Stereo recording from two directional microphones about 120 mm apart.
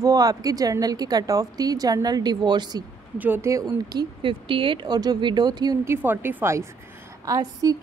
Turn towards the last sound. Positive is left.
turn(degrees=-30)  # may be behind; listen again after turning